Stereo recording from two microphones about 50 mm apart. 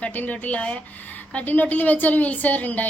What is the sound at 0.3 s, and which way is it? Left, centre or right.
A woman's voice, left.